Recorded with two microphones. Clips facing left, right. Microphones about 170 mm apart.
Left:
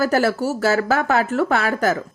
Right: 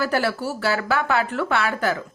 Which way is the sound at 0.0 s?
40° left (ahead or behind).